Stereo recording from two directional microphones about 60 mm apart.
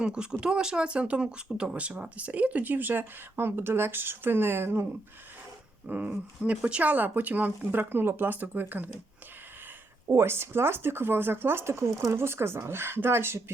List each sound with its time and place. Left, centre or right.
0.0 s speech: centre; by 4.9 s right
5.9 s speech: right
10.1 s speech: right